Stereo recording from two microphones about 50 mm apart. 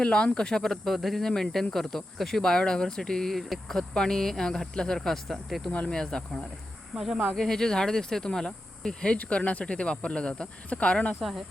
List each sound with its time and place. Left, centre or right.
0.0 s speech: centre
5.9 s speech: centre
6.9 s speech: centre
7.3 s speech: centre
9.1 s speech: left
11.2 s speech: centre